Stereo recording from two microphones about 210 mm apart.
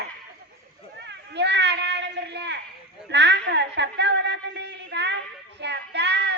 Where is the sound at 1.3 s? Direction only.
55° right (ahead or behind).